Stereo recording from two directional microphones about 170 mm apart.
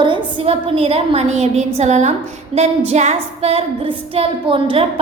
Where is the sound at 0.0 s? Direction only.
30° right (ahead or behind).